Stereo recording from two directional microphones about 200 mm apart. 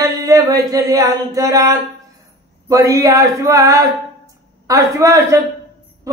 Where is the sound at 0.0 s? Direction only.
20° right (ahead or behind).